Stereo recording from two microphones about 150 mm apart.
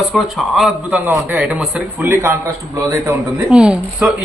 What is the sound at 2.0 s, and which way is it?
Speech, 15° right (ahead or behind).